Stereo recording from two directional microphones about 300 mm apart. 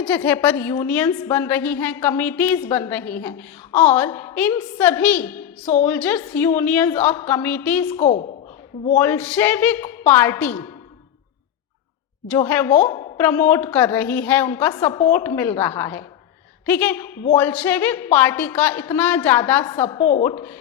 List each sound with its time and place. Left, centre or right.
0.0 s a woman's voice: centre
8.0 s a woman's voice: left
9.0 s a woman's voice: centre
12.3 s a woman's voice: centre